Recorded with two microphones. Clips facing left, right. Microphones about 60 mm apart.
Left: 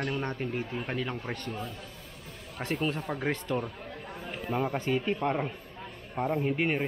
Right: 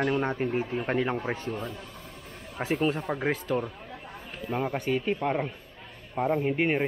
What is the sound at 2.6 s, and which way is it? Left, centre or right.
Speech, centre.